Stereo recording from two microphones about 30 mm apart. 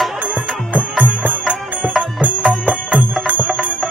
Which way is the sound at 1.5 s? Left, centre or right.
Right.